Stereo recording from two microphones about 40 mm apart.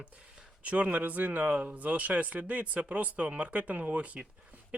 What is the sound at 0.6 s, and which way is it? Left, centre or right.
Speech, right.